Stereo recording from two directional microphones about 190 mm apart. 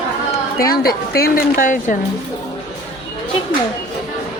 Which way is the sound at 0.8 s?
55° left (ahead or behind).